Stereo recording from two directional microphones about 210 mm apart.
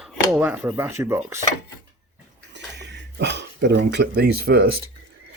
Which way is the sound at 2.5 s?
55° right (ahead or behind).